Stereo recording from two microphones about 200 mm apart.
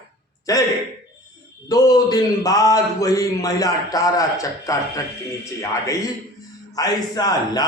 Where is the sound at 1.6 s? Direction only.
20° left (ahead or behind).